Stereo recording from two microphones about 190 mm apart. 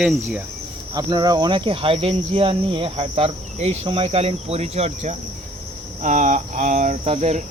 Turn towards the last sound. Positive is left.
turn(degrees=-35)  # may be behind; listen again after turning